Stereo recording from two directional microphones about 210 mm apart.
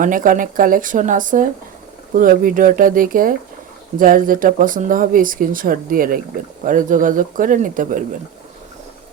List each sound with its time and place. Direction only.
0.0 s speech: 40° right (ahead or behind)